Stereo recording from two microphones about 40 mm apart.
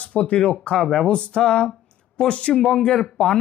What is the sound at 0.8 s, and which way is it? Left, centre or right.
Speech, centre.